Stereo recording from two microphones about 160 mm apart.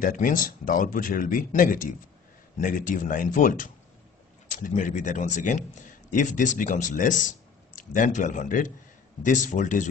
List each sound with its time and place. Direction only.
0.0 s a man's voice: 60° left (ahead or behind)